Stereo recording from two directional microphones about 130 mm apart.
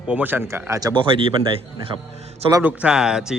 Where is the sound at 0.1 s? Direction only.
15° right (ahead or behind).